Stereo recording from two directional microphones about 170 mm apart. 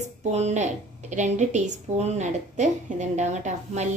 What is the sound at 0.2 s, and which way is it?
A woman's voice, 40° right (ahead or behind).